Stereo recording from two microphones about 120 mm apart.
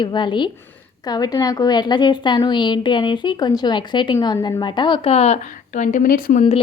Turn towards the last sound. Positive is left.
turn(degrees=90)